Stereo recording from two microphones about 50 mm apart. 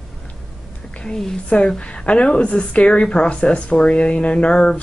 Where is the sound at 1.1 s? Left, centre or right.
Centre.